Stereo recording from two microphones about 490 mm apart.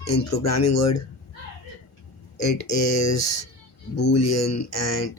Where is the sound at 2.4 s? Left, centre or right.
Left.